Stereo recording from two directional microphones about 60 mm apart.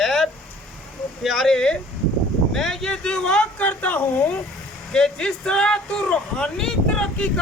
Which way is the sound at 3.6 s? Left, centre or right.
Left.